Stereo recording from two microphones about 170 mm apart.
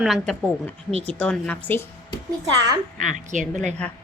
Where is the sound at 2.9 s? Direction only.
50° right (ahead or behind).